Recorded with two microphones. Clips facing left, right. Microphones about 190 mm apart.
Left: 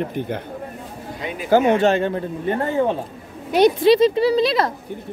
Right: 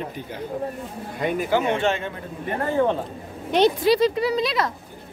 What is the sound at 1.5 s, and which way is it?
Speech, 40° left (ahead or behind).